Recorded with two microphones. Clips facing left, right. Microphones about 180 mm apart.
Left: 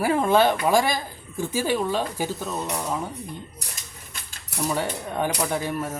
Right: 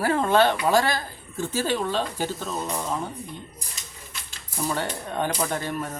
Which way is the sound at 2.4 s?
Centre (ahead or behind).